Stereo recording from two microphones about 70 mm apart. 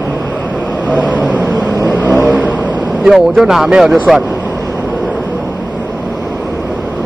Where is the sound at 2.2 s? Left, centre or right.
Right.